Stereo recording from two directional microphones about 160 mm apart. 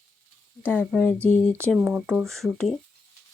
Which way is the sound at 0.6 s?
5° left (ahead or behind).